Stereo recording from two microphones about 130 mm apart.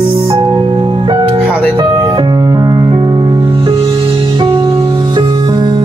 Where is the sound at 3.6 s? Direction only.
45° right (ahead or behind).